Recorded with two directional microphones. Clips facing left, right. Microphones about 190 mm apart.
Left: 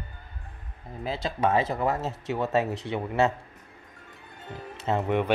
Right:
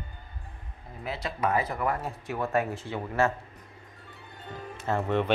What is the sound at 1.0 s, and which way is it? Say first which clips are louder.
Speech: left 4 dB; 25° left (ahead or behind).